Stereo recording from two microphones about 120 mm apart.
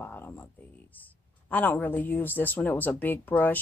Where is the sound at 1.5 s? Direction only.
15° left (ahead or behind).